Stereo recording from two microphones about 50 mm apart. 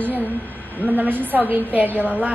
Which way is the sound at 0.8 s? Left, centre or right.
Right.